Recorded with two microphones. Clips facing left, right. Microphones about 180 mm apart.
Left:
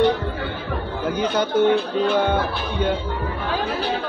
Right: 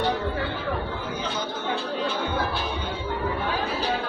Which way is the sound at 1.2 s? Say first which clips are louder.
Left 15 dB; 70° left (ahead or behind).